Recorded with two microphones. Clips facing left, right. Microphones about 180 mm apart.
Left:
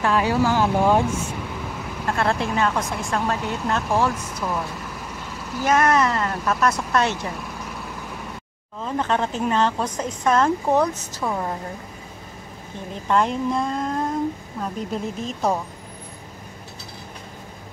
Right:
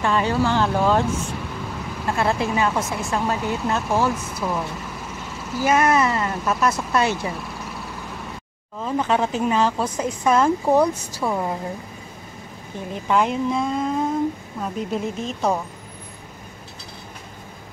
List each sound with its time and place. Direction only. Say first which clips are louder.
0.0 s speech: left 1 dB; 5° left (ahead or behind)
2.0 s speech: right 1 dB; 5° right (ahead or behind)
8.8 s speech: right 2 dB; 5° right (ahead or behind)
13.1 s speech: right 1 dB; 5° right (ahead or behind)